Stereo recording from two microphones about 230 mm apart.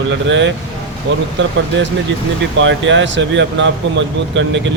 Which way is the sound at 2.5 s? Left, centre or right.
Right.